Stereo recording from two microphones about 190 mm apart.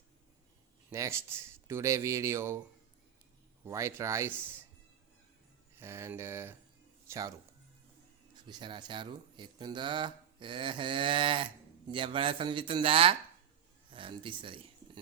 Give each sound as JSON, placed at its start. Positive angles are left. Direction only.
{"t": 0.9, "sound": "speech", "side_deg": -15}
{"t": 3.7, "sound": "speech", "side_deg": -15}
{"t": 5.8, "sound": "speech", "side_deg": -15}
{"t": 8.4, "sound": "speech", "side_deg": -25}